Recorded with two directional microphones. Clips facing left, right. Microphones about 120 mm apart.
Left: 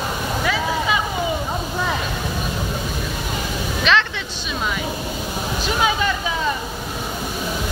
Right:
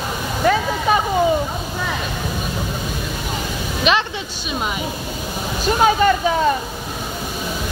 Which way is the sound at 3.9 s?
15° right (ahead or behind).